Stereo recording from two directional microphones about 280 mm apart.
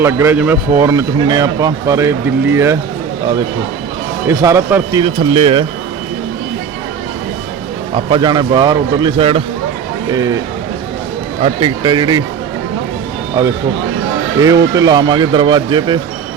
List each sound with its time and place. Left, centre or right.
0.0 s speech: centre
4.3 s speech: centre
7.9 s speech: centre
11.4 s speech: centre
14.4 s speech: centre